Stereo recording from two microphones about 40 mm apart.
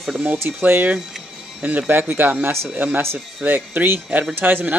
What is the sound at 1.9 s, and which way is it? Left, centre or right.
Speech, right.